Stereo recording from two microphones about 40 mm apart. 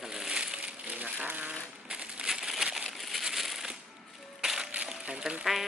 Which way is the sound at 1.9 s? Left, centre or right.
Right.